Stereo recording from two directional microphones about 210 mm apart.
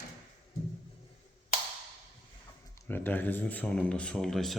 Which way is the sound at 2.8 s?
10° left (ahead or behind).